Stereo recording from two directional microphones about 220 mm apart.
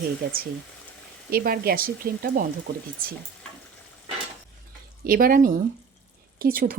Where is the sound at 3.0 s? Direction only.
40° right (ahead or behind).